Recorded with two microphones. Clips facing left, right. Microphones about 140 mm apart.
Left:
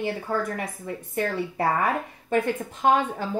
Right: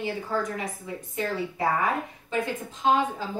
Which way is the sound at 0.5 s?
55° left (ahead or behind).